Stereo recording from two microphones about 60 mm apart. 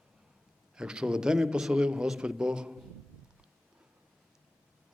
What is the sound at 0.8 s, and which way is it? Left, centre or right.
A man's voice, centre.